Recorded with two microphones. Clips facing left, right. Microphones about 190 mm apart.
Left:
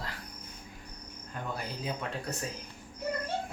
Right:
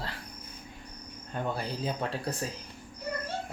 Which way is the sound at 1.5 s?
30° right (ahead or behind).